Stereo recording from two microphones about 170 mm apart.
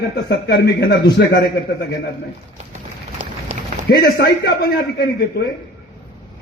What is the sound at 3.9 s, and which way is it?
A man's voice, 70° left (ahead or behind).